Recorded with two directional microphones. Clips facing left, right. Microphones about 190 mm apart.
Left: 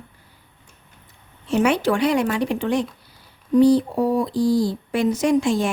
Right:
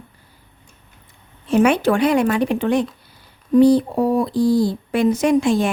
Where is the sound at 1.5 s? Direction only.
55° right (ahead or behind).